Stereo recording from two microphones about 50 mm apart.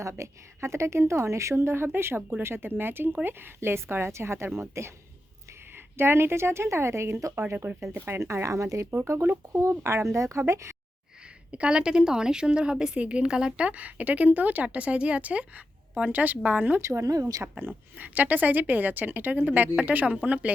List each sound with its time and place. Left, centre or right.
0.0 s a woman's voice: right
5.7 s a woman's voice: right
11.5 s a woman's voice: right
16.8 s a woman's voice: right
17.6 s speech: right